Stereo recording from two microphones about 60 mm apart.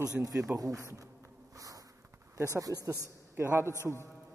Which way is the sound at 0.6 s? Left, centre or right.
Right.